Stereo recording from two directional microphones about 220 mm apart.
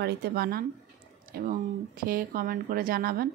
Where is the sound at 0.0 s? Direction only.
45° right (ahead or behind).